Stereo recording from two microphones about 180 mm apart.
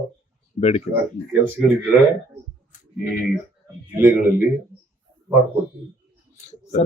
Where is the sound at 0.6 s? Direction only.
35° left (ahead or behind).